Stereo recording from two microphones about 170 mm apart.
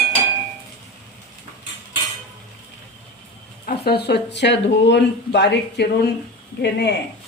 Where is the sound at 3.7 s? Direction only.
70° left (ahead or behind).